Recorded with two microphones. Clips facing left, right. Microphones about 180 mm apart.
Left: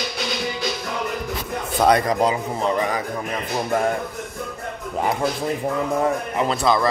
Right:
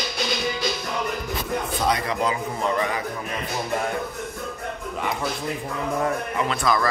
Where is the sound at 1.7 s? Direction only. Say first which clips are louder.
Left 9 dB; 60° left (ahead or behind).